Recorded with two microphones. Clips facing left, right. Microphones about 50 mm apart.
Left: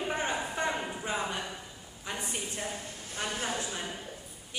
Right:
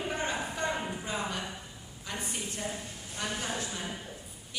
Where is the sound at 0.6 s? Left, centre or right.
Centre.